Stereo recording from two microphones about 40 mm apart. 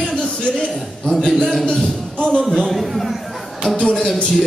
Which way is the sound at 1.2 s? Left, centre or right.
Centre.